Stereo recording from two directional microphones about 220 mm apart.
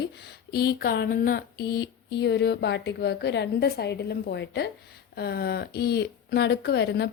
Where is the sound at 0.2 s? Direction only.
45° left (ahead or behind).